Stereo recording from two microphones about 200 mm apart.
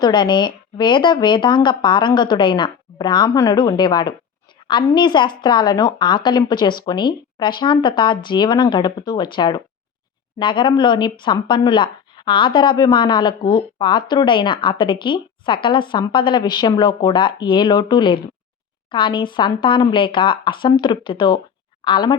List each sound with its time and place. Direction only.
0.0 s speech: 20° left (ahead or behind)